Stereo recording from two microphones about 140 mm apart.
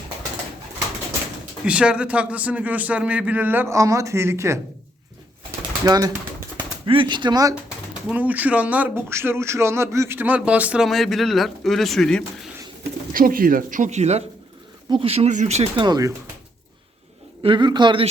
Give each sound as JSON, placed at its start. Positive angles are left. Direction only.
{"t": 1.6, "sound": "a man's voice", "side_deg": -5}
{"t": 5.8, "sound": "speech", "side_deg": -25}
{"t": 6.6, "sound": "speech", "side_deg": -40}
{"t": 8.1, "sound": "a man's voice", "side_deg": -10}
{"t": 13.1, "sound": "speech", "side_deg": -90}
{"t": 14.8, "sound": "speech", "side_deg": -40}
{"t": 17.4, "sound": "a man's voice", "side_deg": -35}